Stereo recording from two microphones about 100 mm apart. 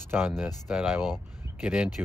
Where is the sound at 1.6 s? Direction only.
5° right (ahead or behind).